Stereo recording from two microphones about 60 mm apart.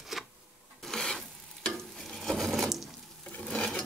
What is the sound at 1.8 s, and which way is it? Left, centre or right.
Stir, centre.